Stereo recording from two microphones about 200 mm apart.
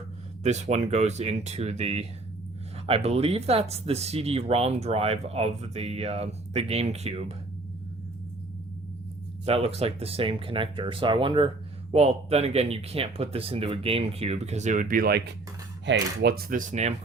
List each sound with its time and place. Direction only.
0.4 s speech: 35° right (ahead or behind)
9.5 s speech: 30° right (ahead or behind)